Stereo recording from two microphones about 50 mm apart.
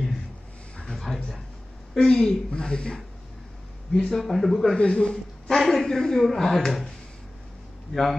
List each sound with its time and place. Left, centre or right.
0.7 s a sound: centre
2.0 s a woman's voice: centre
4.1 s speech: centre
4.7 s a man's voice: left
5.6 s a woman's voice: centre
7.9 s speech: centre